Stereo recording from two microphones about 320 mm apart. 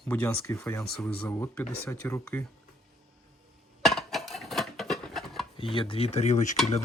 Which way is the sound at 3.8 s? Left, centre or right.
Centre.